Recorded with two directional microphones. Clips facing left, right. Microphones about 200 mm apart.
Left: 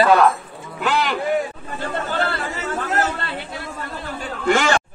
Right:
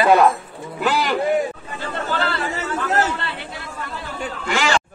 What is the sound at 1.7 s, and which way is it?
Chatter, 50° left (ahead or behind).